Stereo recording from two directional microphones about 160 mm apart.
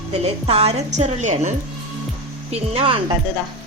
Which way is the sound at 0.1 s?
40° right (ahead or behind).